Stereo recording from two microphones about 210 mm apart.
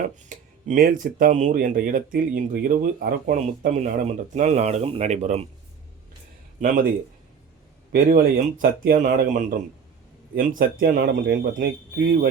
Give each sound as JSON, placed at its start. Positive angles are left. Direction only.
{"t": 0.2, "sound": "speech", "side_deg": -40}
{"t": 7.9, "sound": "speech", "side_deg": -45}